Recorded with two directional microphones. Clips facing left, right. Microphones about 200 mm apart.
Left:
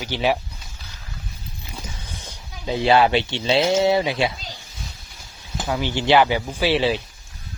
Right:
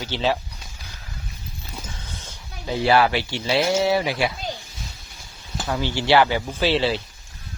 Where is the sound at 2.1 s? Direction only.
15° left (ahead or behind).